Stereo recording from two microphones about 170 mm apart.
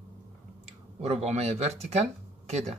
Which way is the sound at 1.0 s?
40° right (ahead or behind).